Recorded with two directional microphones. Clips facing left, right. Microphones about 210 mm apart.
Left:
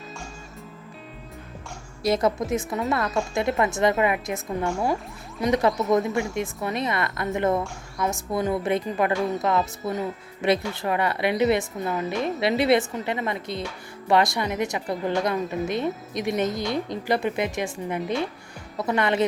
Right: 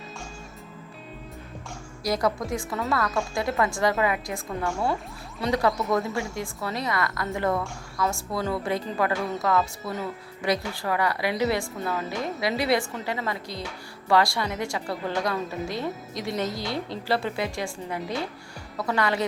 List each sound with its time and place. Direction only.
2.0 s speech: 25° left (ahead or behind)